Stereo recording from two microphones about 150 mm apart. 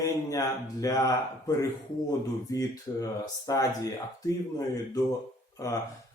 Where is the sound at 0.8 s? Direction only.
20° left (ahead or behind).